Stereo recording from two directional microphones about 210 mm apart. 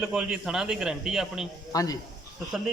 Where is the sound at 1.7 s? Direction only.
15° left (ahead or behind).